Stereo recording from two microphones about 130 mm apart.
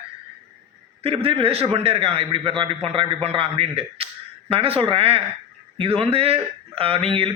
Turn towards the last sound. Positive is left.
turn(degrees=-45)  # may be behind; listen again after turning